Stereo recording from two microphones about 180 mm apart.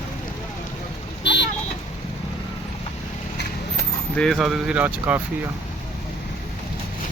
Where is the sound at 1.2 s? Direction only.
75° left (ahead or behind).